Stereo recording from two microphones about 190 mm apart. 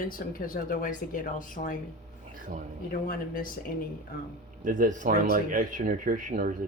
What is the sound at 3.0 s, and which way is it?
Speech, 45° left (ahead or behind).